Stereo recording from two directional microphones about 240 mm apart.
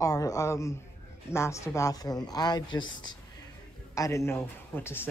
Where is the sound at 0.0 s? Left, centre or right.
Centre.